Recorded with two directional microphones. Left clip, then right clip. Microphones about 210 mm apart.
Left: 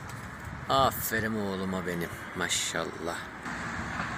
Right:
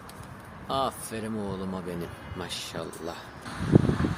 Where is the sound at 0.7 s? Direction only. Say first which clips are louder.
Left 4 dB; centre (ahead or behind).